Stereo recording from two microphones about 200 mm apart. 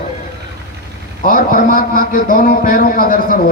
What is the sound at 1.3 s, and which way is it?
A man's voice, 45° left (ahead or behind).